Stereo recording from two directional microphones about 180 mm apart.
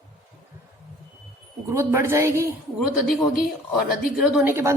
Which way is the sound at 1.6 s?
15° right (ahead or behind).